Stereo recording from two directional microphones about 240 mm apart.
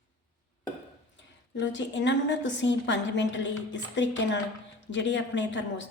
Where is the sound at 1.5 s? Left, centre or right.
Left.